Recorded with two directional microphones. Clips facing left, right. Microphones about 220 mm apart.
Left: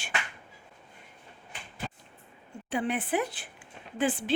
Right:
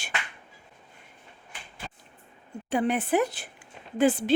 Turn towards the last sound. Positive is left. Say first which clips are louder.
# right 6 dB
turn(degrees=-40)  # may be behind; listen again after turning